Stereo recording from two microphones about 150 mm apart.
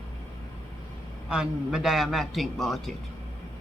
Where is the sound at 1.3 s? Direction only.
5° right (ahead or behind).